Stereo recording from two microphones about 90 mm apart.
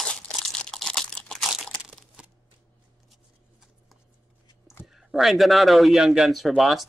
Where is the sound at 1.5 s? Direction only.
5° right (ahead or behind).